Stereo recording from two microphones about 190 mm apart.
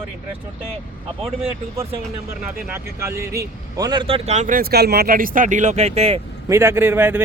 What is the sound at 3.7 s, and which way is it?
Speech, 20° right (ahead or behind).